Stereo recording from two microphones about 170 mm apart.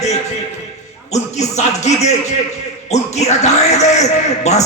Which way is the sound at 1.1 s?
40° left (ahead or behind).